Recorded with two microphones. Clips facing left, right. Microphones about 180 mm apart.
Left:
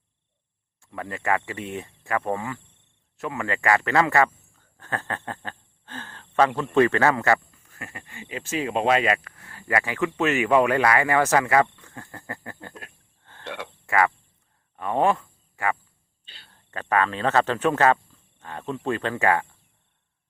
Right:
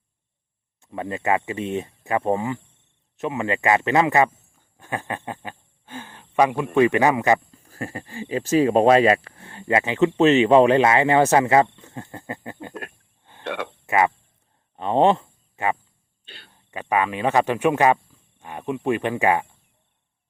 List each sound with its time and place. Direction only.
0.8 s a man's voice: 20° right (ahead or behind)
7.5 s speech: 35° right (ahead or behind); by 12.7 s 20° right (ahead or behind)
13.4 s a sound: 60° right (ahead or behind)
13.8 s speech: 20° right (ahead or behind)
16.2 s a sound: 60° right (ahead or behind)
16.5 s speech: 15° right (ahead or behind)